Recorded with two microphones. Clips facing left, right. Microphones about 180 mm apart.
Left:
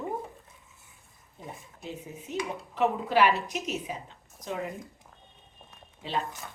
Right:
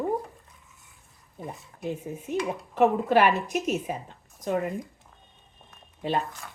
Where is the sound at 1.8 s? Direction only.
50° right (ahead or behind).